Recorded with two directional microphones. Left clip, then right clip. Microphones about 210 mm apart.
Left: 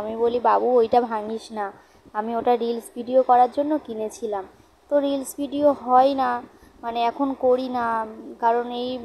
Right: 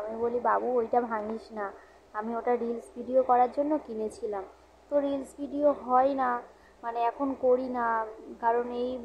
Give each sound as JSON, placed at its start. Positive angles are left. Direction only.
{"t": 0.2, "sound": "a woman's voice", "side_deg": 35}